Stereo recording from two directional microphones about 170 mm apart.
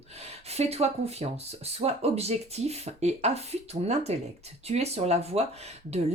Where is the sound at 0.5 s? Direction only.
40° right (ahead or behind).